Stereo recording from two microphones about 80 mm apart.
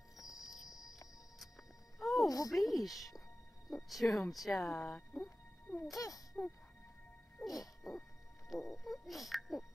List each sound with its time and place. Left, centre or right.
0.3 s music: centre
2.2 s speech: left
2.5 s speech: centre
5.9 s a child's voice: left
7.4 s hoot: left
8.5 s dog: centre